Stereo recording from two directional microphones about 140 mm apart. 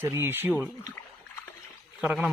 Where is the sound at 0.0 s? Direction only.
15° right (ahead or behind).